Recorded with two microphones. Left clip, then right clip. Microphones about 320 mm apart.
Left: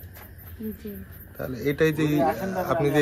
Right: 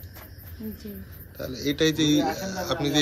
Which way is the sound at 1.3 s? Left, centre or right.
Left.